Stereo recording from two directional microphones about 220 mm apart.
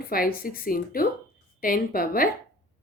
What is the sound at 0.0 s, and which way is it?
Speech, 40° left (ahead or behind).